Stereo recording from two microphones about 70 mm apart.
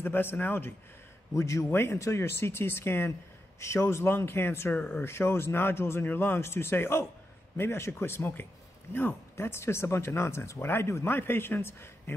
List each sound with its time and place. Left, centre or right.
0.0 s speech: left
1.3 s a man's voice: left
1.7 s speech: left
2.0 s speech: left